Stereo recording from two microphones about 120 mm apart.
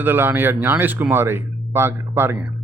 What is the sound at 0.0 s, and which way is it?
Speech, 20° right (ahead or behind).